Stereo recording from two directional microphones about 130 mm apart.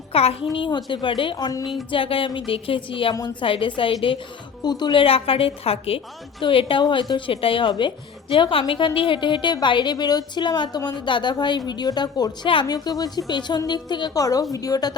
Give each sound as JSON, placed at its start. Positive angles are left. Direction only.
{"t": 0.1, "sound": "a woman's voice", "side_deg": 50}
{"t": 0.5, "sound": "a woman's voice", "side_deg": 35}
{"t": 1.9, "sound": "a woman's voice", "side_deg": 45}